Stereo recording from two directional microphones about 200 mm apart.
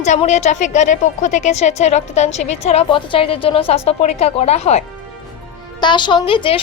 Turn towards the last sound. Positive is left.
turn(degrees=25)  # may be behind; listen again after turning